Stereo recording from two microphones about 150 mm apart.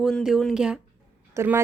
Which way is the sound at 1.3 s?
15° right (ahead or behind).